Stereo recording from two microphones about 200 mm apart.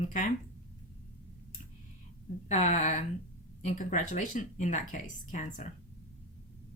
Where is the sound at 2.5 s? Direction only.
35° left (ahead or behind).